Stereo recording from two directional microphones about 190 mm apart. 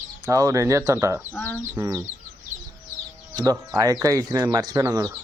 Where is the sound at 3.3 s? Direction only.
15° right (ahead or behind).